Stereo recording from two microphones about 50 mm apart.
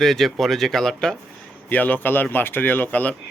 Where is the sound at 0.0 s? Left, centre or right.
Centre.